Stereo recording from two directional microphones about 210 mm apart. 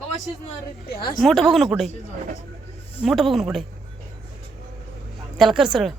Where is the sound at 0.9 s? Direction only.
45° left (ahead or behind).